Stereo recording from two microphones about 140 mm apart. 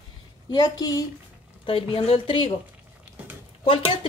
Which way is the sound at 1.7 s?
40° left (ahead or behind).